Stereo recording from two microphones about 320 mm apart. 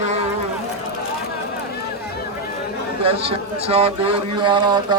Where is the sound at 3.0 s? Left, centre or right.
Centre.